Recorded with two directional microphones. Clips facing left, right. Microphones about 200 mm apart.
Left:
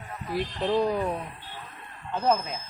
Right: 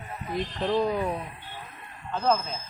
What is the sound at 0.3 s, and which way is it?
Speech, 10° left (ahead or behind).